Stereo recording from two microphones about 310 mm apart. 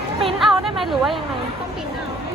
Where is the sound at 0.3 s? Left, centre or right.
Centre.